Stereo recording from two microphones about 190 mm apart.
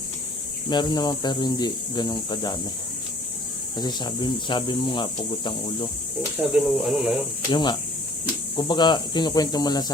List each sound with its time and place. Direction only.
0.7 s speech: 25° left (ahead or behind)
3.8 s speech: 25° left (ahead or behind)
6.5 s speech: 5° right (ahead or behind)
7.5 s speech: 25° left (ahead or behind)